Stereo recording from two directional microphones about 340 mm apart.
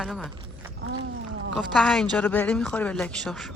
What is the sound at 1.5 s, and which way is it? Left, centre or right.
Speech, centre.